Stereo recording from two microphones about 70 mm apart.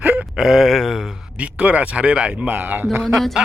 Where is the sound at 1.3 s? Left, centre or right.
Centre.